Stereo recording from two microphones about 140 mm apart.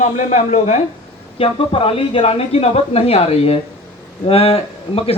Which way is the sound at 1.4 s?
40° left (ahead or behind).